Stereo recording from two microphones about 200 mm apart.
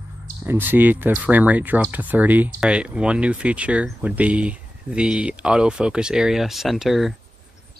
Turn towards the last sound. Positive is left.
turn(degrees=0)  # may be behind; listen again after turning